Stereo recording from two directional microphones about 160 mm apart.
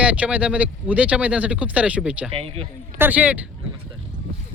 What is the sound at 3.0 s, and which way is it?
Speech, 10° right (ahead or behind).